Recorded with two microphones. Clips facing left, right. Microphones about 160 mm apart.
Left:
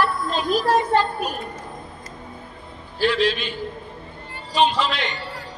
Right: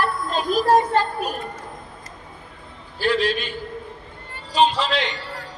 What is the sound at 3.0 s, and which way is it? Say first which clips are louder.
Speech: left 1 dB; 45° right (ahead or behind).